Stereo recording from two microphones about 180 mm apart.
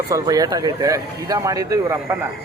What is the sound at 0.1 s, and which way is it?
Speech, 20° right (ahead or behind).